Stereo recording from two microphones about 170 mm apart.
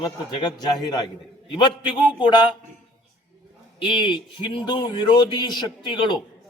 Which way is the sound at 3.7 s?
30° left (ahead or behind).